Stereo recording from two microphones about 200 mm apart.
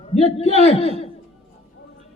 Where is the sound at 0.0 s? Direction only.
30° left (ahead or behind).